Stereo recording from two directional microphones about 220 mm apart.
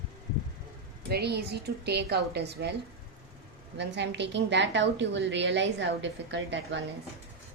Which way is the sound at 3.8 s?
50° right (ahead or behind).